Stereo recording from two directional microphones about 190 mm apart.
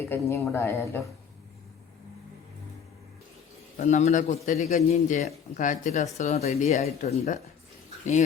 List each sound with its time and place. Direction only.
0.1 s a woman's voice: 15° left (ahead or behind)
3.8 s a man's voice: 40° left (ahead or behind)